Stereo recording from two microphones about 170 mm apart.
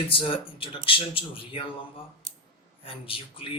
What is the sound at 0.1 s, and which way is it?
A man's voice, 30° left (ahead or behind).